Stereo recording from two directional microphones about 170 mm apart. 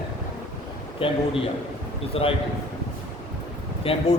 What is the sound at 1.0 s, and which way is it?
A man's voice, 35° left (ahead or behind).